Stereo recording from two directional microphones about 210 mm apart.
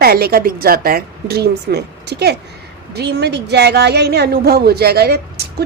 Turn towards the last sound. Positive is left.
turn(degrees=-50)  # may be behind; listen again after turning